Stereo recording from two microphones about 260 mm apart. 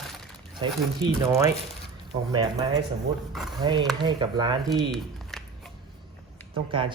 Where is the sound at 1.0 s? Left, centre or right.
Centre.